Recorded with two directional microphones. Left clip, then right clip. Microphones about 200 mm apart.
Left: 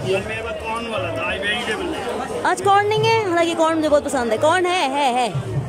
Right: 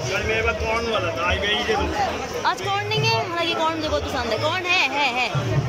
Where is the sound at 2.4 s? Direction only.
40° left (ahead or behind).